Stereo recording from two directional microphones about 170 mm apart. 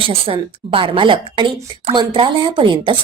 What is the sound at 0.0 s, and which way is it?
A woman's voice, 30° right (ahead or behind).